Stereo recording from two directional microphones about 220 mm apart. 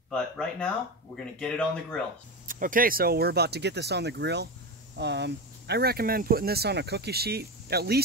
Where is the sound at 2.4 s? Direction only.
40° right (ahead or behind).